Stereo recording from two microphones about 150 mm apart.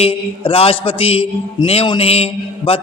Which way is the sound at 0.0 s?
40° left (ahead or behind).